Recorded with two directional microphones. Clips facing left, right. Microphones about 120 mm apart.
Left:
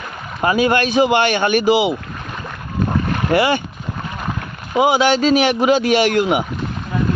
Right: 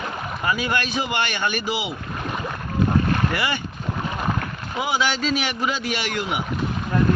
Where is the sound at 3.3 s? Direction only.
55° left (ahead or behind).